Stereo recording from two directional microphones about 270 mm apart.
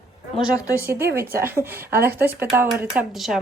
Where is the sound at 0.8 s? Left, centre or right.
Centre.